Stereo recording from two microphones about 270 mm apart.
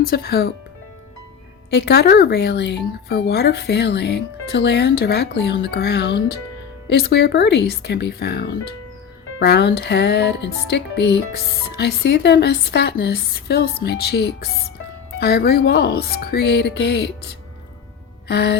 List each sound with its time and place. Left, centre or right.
0.0 s speech: left
1.7 s speech: left
18.3 s music: left